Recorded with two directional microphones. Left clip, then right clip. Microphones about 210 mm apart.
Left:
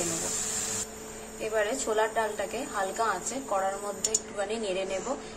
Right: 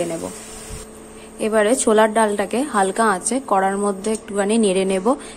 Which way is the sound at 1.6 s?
55° right (ahead or behind).